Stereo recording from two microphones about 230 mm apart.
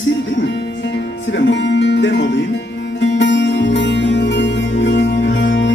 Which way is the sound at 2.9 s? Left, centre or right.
Left.